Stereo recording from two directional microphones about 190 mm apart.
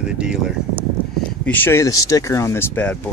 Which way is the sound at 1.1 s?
10° left (ahead or behind).